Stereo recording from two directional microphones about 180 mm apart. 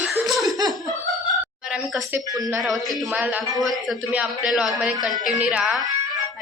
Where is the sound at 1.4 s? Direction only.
5° right (ahead or behind).